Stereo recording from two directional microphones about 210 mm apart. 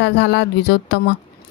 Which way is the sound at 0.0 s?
55° left (ahead or behind).